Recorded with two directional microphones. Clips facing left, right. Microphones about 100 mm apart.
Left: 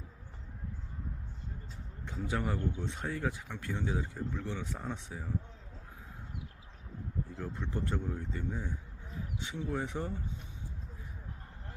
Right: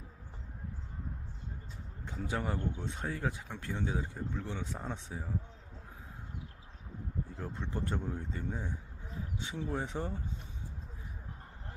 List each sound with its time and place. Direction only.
2.0 s speech: 25° right (ahead or behind)
7.3 s speech: 25° right (ahead or behind)